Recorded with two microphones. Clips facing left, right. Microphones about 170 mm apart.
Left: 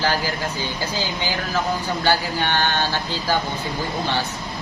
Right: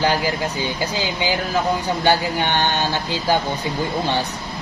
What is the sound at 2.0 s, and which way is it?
Speech, 20° right (ahead or behind).